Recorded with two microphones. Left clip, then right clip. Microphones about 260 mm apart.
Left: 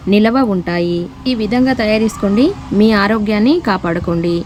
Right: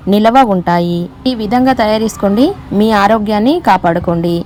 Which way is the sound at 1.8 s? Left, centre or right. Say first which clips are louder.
Right 2 dB; centre.